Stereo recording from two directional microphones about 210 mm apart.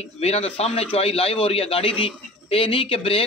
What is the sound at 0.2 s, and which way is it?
A man's voice, 30° left (ahead or behind).